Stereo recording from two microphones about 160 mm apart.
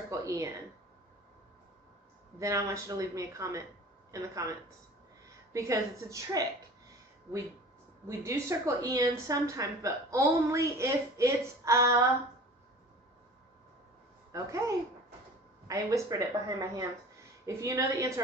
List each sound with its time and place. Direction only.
0.1 s speech: 20° right (ahead or behind)
2.3 s a woman's voice: 20° right (ahead or behind)
8.2 s a woman's voice: 20° right (ahead or behind)
14.3 s a woman's voice: 20° right (ahead or behind)